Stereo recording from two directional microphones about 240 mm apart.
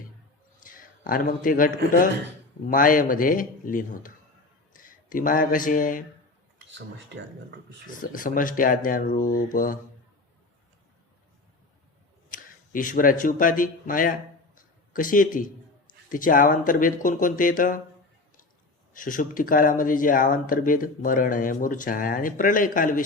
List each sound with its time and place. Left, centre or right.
0.6 s a man's voice: left
6.6 s speech: right
7.9 s speech: left
12.3 s speech: left
18.9 s speech: left